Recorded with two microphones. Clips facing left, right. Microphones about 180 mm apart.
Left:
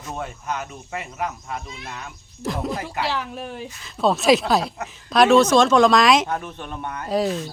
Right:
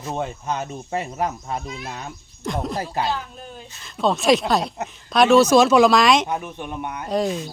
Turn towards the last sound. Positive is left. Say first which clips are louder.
# even
turn(degrees=-15)  # may be behind; listen again after turning